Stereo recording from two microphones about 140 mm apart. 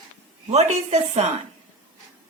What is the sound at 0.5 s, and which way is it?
Speech, 50° right (ahead or behind).